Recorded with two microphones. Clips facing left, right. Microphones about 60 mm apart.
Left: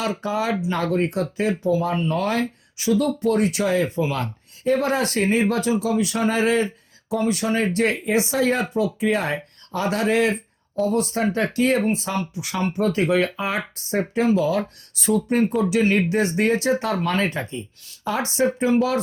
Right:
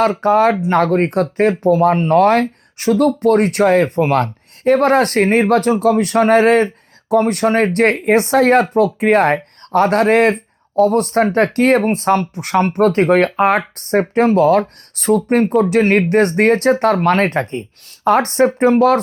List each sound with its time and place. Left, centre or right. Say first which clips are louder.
0.0 s speech: right 11 dB; right